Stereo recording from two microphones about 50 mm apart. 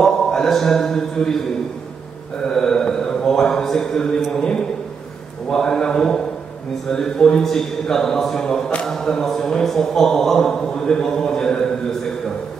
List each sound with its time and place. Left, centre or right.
0.0 s speech: centre
2.4 s mantra: centre
5.5 s a man's voice: centre
6.9 s a sound: centre